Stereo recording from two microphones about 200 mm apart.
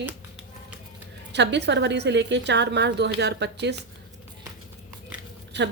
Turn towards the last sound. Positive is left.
turn(degrees=-60)  # may be behind; listen again after turning